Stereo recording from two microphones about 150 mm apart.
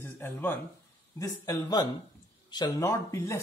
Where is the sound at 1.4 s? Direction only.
25° left (ahead or behind).